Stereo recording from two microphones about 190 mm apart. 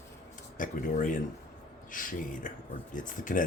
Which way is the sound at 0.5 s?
45° left (ahead or behind).